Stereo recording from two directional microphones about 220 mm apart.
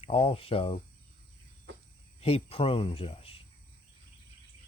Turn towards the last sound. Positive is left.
turn(degrees=25)  # may be behind; listen again after turning